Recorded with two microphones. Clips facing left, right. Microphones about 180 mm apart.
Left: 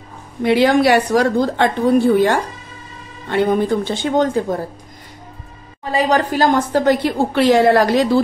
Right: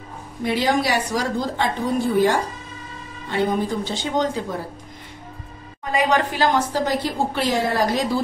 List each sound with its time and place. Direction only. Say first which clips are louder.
0.4 s a woman's voice: left 7 dB; 70° left (ahead or behind); by 4.6 s 50° left (ahead or behind)
5.9 s a woman's voice: left 4 dB; 35° left (ahead or behind); by 8.2 s 65° left (ahead or behind)